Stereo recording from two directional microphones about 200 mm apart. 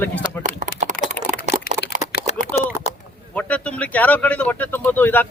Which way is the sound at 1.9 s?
40° right (ahead or behind).